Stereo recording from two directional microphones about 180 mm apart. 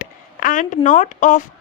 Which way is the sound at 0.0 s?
50° left (ahead or behind).